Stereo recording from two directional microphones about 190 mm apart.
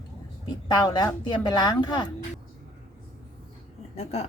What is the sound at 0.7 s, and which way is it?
Speech, 20° left (ahead or behind).